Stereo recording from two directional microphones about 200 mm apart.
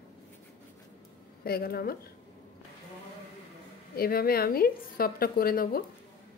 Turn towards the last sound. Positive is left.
turn(degrees=45)  # may be behind; listen again after turning